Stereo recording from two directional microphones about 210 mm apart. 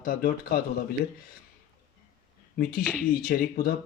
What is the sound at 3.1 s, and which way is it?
Speech, 45° left (ahead or behind).